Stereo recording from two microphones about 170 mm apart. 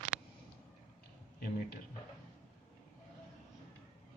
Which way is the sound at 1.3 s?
65° left (ahead or behind).